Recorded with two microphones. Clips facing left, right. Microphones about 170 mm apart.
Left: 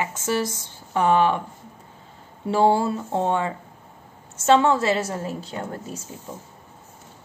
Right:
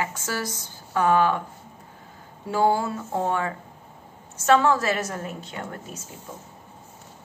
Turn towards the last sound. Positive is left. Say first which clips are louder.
# left 4 dB
turn(degrees=30)  # may be behind; listen again after turning